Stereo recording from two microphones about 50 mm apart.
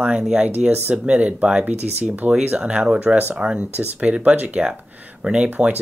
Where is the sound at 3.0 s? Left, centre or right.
Right.